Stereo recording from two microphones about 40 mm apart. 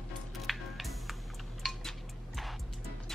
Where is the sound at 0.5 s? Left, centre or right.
Centre.